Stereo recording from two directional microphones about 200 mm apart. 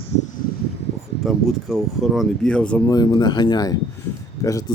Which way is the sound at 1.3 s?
Centre (ahead or behind).